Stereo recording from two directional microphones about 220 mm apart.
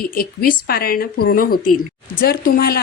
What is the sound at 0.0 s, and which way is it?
Speech, 45° left (ahead or behind).